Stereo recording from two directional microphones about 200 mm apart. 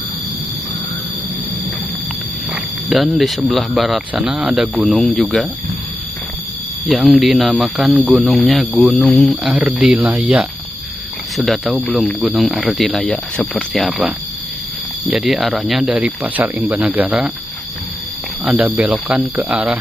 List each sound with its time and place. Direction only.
2.5 s speech: centre (ahead or behind)
6.9 s speech: centre (ahead or behind)
18.4 s speech: 5° right (ahead or behind)